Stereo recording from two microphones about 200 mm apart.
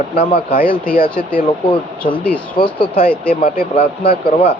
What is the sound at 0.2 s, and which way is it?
Speech, 45° left (ahead or behind).